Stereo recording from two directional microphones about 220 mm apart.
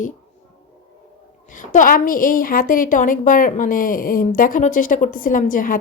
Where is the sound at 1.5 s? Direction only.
35° left (ahead or behind).